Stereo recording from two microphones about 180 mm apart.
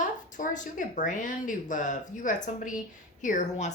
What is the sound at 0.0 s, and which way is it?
A woman's voice, 45° left (ahead or behind).